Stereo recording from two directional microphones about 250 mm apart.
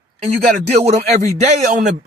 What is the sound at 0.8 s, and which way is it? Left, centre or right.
Speech, right.